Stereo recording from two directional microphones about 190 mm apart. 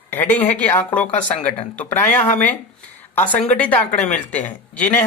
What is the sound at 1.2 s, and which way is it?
Speech, 35° left (ahead or behind).